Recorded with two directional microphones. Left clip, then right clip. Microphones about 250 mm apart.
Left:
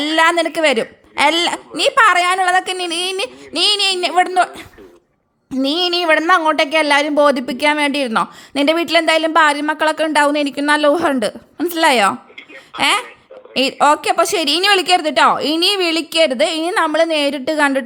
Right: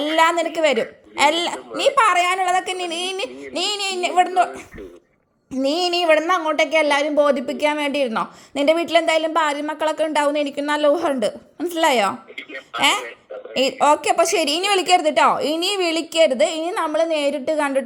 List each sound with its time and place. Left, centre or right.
0.0 s a sound: left
0.5 s speech: left
6.0 s speech: centre
11.5 s a woman's voice: left
11.8 s speech: left
12.4 s a sound: centre
12.8 s speech: left